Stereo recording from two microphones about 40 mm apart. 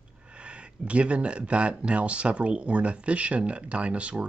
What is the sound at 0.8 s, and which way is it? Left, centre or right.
Speech, right.